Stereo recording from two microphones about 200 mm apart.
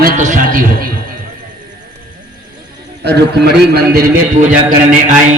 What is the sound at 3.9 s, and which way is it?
Speech, 40° right (ahead or behind).